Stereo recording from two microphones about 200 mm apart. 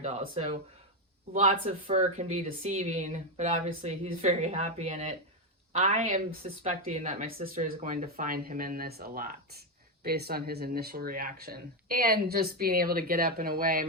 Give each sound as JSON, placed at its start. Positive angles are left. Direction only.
{"t": 0.0, "sound": "speech", "side_deg": -35}